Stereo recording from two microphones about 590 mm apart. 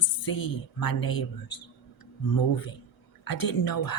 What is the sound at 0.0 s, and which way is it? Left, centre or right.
Speech, left.